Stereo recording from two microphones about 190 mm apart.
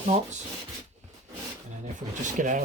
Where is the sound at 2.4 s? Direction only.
45° right (ahead or behind).